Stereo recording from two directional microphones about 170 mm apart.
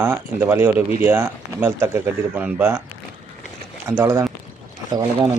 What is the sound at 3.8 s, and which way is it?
Speech, 15° right (ahead or behind).